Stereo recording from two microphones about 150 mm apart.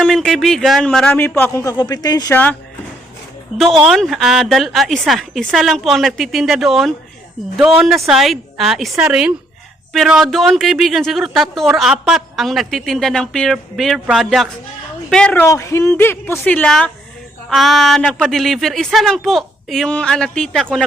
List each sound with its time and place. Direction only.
0.0 s a woman's voice: centre (ahead or behind)
1.6 s speech: 25° left (ahead or behind)
2.3 s speech: 10° left (ahead or behind)
3.8 s a woman's voice: centre (ahead or behind)
15.4 s a woman's voice: 20° left (ahead or behind)